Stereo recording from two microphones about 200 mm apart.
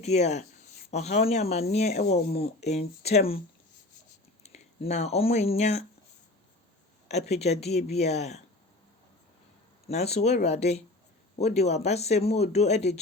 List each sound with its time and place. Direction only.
0.0 s speech: 35° left (ahead or behind)
4.4 s speech: 35° left (ahead or behind)
7.1 s speech: 35° left (ahead or behind)
9.9 s speech: 30° left (ahead or behind)